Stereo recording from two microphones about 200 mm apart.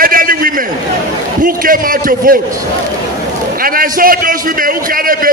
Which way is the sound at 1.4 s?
45° right (ahead or behind).